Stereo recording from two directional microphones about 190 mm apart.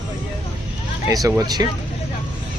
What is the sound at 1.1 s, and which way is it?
Speech, 20° right (ahead or behind).